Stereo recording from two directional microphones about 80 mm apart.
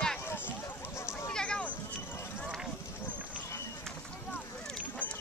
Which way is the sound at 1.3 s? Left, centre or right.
Centre.